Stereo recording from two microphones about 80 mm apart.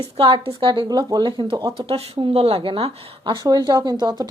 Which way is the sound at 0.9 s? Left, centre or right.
Right.